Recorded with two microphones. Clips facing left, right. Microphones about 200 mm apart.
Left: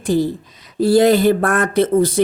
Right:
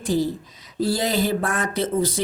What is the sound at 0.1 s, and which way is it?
Speech, 60° left (ahead or behind).